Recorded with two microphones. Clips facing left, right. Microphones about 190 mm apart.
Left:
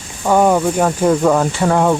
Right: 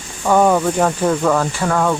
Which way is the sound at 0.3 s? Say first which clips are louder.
Left 1 dB; 10° left (ahead or behind).